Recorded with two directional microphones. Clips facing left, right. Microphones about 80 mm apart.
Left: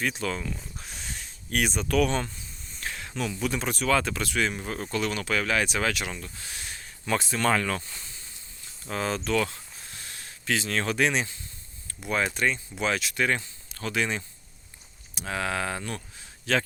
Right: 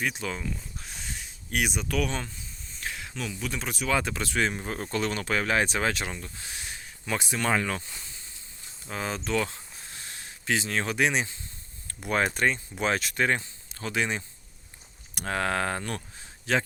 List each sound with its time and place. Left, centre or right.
0.0 s speech: centre
0.5 s a sound: centre
3.8 s speech: centre
12.0 s speech: right
15.1 s speech: right